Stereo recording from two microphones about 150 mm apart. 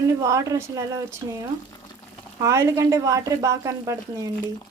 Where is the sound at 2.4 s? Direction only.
20° right (ahead or behind).